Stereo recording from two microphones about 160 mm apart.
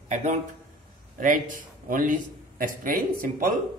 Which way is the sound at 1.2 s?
55° right (ahead or behind).